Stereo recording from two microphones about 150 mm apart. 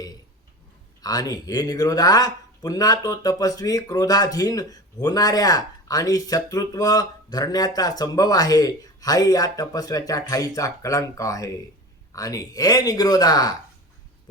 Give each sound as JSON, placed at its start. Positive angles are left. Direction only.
{"t": 1.0, "sound": "speech", "side_deg": 25}